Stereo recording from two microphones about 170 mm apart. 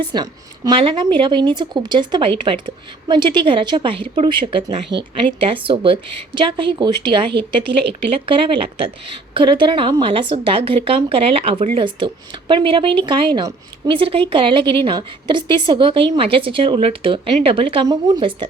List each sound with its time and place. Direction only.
0.1 s speech: 25° right (ahead or behind)